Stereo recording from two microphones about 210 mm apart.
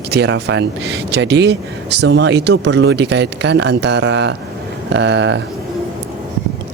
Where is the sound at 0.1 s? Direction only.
55° right (ahead or behind).